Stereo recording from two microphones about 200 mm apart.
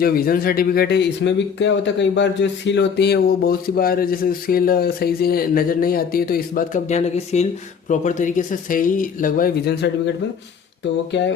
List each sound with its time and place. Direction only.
0.0 s speech: 45° left (ahead or behind)